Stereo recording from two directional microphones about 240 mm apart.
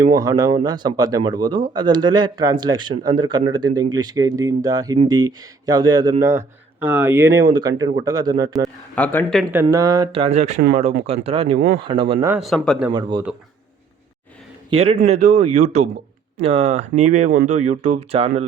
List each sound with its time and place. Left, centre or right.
0.1 s speech: centre
8.5 s speech: centre
9.5 s speech: centre
11.5 s speech: right
11.8 s speech: right
12.3 s speech: centre
12.9 s speech: centre
14.7 s speech: right